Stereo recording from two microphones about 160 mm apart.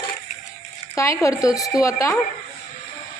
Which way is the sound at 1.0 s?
20° left (ahead or behind).